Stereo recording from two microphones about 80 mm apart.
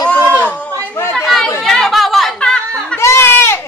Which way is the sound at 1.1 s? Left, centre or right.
Centre.